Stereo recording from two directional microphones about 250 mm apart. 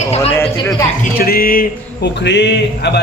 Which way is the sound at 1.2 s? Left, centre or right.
Left.